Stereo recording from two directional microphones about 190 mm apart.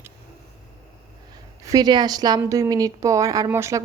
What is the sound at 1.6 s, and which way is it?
Speech, 20° right (ahead or behind).